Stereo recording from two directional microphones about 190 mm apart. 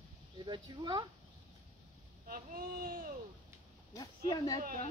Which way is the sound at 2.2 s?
50° right (ahead or behind).